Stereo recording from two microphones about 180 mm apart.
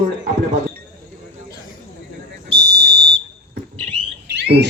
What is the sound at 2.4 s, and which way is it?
Fire alarm, 60° right (ahead or behind).